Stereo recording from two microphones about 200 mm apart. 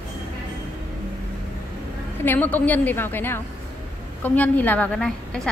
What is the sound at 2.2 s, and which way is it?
A woman's voice, 10° left (ahead or behind).